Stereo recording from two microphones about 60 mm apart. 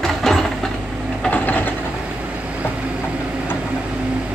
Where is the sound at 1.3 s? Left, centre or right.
Left.